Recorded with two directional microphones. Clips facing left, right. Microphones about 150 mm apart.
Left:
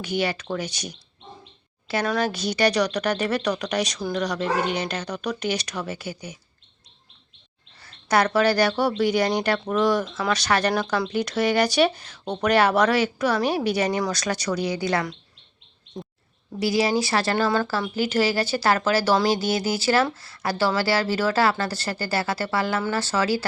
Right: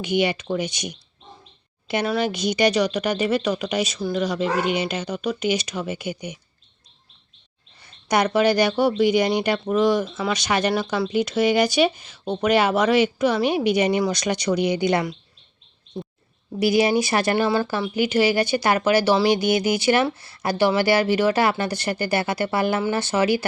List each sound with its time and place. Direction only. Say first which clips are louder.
0.1 s speech: right 4 dB; 15° right (ahead or behind)
2.0 s speech: right 2 dB; 10° right (ahead or behind)
7.8 s speech: even; 15° right (ahead or behind)
16.6 s speech: right 3 dB; 20° right (ahead or behind)